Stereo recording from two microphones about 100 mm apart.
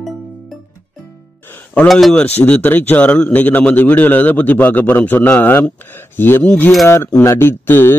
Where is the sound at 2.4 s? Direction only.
20° left (ahead or behind).